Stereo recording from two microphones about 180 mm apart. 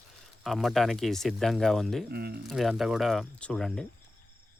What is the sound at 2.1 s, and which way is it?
Speech, 60° right (ahead or behind).